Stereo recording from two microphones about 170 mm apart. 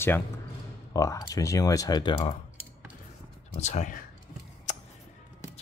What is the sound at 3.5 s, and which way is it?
Speech, 40° left (ahead or behind).